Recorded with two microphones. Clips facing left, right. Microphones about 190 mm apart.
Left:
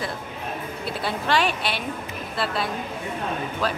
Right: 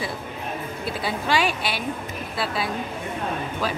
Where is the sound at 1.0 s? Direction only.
5° right (ahead or behind).